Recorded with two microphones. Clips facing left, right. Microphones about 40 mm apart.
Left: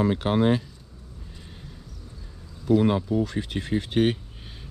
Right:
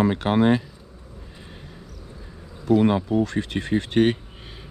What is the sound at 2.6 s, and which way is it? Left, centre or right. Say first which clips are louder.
Speech: right 2 dB; centre.